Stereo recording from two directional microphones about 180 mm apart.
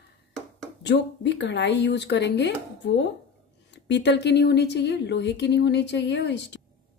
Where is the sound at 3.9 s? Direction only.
75° left (ahead or behind).